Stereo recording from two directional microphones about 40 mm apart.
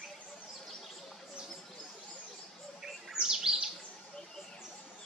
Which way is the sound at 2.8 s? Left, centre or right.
Centre.